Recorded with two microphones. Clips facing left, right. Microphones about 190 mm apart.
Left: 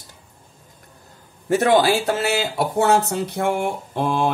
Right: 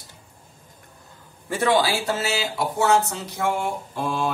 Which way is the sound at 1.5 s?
45° left (ahead or behind).